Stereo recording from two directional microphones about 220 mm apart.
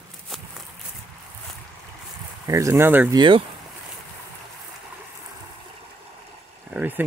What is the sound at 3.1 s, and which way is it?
Speech, 20° right (ahead or behind).